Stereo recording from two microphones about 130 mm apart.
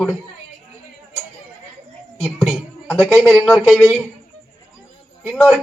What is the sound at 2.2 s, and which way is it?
A woman's voice, centre (ahead or behind).